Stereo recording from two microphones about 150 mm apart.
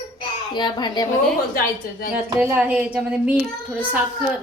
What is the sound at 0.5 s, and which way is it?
Speech, 30° left (ahead or behind).